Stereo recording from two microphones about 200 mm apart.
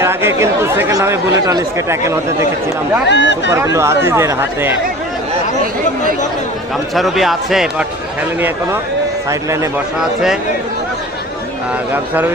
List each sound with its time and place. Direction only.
0.0 s speech: 10° right (ahead or behind)
3.1 s speech: 60° left (ahead or behind)
3.5 s speech: 15° right (ahead or behind)
6.9 s speech: centre (ahead or behind)
10.0 s speech: centre (ahead or behind)